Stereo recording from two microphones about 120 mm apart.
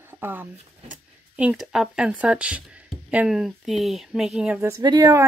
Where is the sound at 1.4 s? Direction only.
5° right (ahead or behind).